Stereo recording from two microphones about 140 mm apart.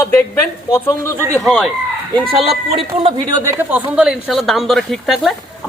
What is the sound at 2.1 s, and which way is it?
Speech, 40° right (ahead or behind).